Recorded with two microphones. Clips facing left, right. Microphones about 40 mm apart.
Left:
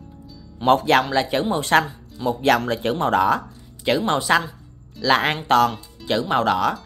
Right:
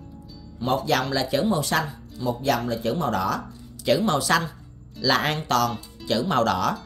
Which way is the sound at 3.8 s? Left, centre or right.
Left.